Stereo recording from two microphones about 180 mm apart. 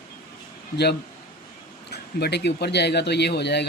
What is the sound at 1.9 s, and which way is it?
Speech, 65° left (ahead or behind).